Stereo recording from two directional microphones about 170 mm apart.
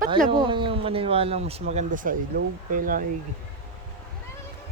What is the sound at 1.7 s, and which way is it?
Speech, 45° right (ahead or behind).